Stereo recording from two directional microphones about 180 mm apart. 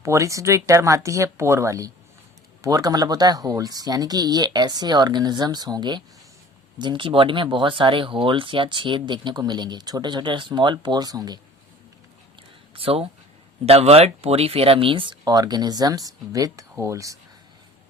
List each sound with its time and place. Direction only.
0.0 s speech: 15° right (ahead or behind)
12.7 s speech: 30° right (ahead or behind)